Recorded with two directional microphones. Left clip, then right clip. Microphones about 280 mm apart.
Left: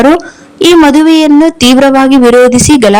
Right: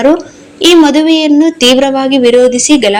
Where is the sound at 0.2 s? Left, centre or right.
Left.